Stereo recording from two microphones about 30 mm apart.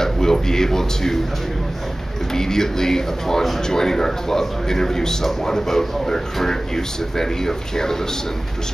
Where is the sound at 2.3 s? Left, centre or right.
Centre.